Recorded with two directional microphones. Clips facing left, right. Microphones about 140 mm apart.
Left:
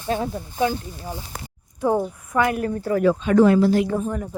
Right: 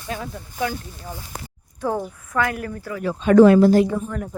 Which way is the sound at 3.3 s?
80° right.